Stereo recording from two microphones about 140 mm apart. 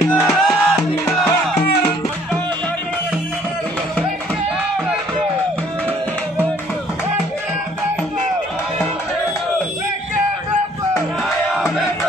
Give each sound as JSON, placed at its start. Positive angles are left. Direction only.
{"t": 0.1, "sound": "music", "side_deg": 0}
{"t": 11.5, "sound": "music", "side_deg": -5}